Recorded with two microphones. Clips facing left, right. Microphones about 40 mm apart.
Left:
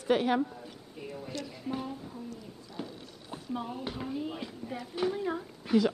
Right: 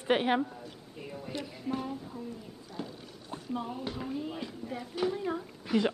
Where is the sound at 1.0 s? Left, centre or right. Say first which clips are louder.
Even; centre.